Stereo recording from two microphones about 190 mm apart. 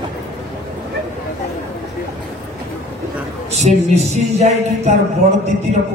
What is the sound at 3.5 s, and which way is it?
Music, 35° right (ahead or behind).